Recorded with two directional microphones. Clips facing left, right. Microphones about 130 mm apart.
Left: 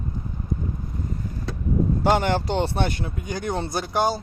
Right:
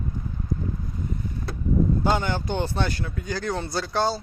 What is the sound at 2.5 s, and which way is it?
Speech, 25° left (ahead or behind).